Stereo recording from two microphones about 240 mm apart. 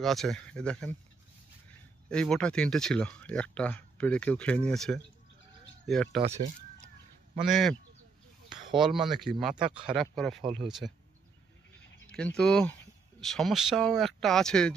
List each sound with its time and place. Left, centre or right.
0.0 s speech: centre
2.0 s speech: centre
6.2 s speech: right
7.4 s speech: centre
12.4 s speech: centre